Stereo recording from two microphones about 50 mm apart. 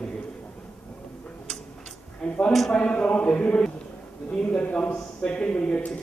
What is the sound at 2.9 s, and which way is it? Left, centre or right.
Mantra, left.